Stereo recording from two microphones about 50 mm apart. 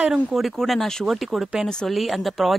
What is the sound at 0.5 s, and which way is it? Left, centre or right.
Speech, centre.